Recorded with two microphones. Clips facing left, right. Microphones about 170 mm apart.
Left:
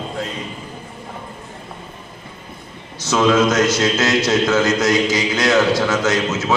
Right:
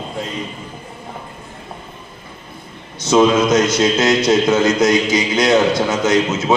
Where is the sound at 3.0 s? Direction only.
20° right (ahead or behind).